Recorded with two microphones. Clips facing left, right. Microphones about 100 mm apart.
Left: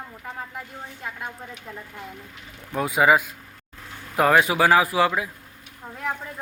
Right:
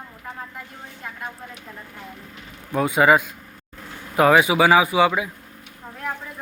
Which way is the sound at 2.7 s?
Centre (ahead or behind).